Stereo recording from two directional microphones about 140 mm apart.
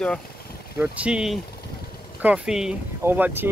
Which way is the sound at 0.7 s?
5° right (ahead or behind).